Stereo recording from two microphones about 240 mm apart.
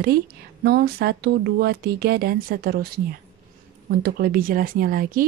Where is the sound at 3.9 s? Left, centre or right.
Right.